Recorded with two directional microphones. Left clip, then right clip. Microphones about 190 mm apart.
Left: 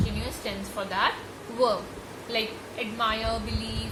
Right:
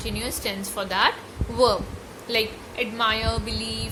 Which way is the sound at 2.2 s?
55° right (ahead or behind).